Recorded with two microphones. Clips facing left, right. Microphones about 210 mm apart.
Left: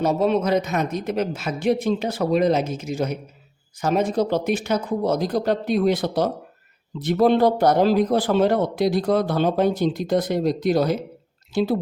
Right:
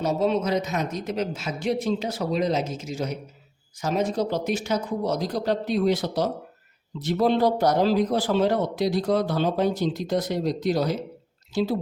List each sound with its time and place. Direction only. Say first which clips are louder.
0.0 s speech: left 3 dB; 55° left (ahead or behind)